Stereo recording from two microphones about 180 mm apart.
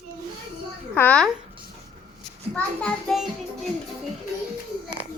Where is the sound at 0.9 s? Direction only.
10° left (ahead or behind).